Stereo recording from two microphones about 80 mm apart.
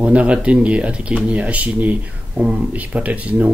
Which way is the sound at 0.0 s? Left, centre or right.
Centre.